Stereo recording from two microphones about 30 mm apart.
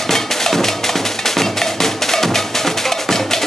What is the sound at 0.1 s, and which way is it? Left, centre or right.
Music, centre.